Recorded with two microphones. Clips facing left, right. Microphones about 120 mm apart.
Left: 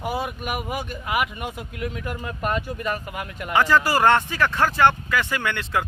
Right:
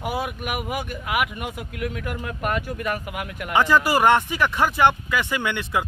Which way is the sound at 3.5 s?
15° right (ahead or behind).